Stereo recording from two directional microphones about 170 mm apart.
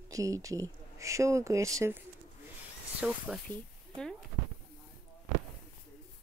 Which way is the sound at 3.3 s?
5° left (ahead or behind).